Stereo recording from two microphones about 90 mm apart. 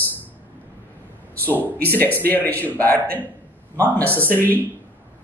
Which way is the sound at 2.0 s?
20° left (ahead or behind).